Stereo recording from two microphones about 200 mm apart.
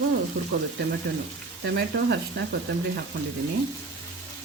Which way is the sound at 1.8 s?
55° right (ahead or behind).